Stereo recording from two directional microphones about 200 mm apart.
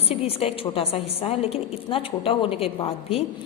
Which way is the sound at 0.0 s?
30° left (ahead or behind).